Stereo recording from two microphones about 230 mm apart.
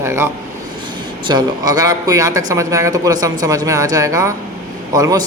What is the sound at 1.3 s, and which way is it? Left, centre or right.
Speech, centre.